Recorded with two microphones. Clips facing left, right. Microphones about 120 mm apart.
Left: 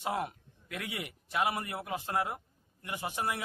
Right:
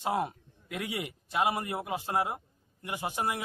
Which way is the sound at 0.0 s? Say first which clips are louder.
Right 4 dB; 25° right (ahead or behind).